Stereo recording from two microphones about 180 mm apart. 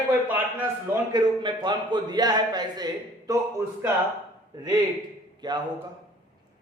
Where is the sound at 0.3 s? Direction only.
10° right (ahead or behind).